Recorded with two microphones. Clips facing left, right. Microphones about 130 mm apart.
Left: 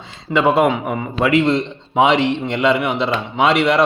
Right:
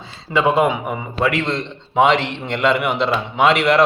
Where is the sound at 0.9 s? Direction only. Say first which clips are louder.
Left 3 dB; 15° left (ahead or behind).